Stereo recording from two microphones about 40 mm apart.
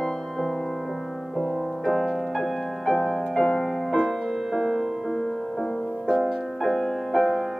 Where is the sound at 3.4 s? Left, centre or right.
Left.